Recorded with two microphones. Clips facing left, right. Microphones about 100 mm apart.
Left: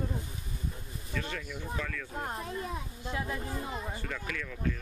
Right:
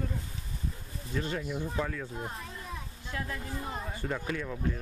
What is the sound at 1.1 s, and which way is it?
Speech, 30° right (ahead or behind).